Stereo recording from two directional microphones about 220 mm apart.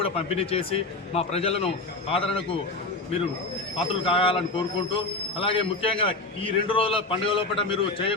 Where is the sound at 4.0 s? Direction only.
25° left (ahead or behind).